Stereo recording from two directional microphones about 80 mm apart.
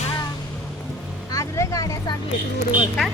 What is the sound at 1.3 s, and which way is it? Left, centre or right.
Speech, left.